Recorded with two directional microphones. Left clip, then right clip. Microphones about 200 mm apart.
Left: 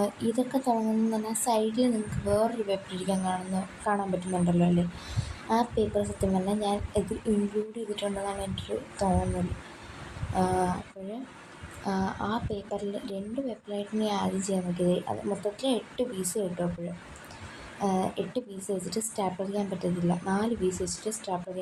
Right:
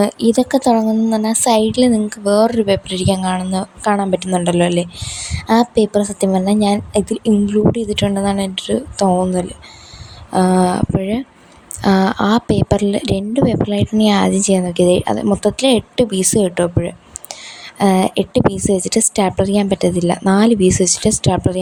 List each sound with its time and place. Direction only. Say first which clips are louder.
0.0 s a woman's voice: right 14 dB; 50° right (ahead or behind)
10.3 s a woman's voice: right 13 dB; 50° right (ahead or behind)